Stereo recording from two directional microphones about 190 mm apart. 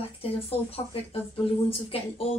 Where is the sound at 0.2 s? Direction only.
30° left (ahead or behind).